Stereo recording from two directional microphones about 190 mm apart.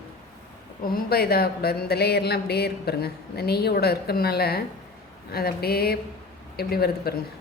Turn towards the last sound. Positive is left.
turn(degrees=55)  # may be behind; listen again after turning